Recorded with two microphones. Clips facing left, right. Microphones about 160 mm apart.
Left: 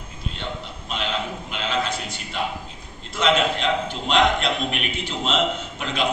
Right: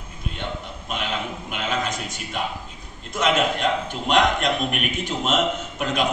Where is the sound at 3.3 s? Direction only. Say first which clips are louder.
Even; 45° right (ahead or behind).